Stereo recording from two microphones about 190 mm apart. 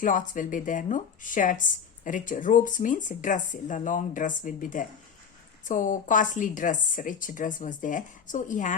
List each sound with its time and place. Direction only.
0.0 s speech: 45° left (ahead or behind)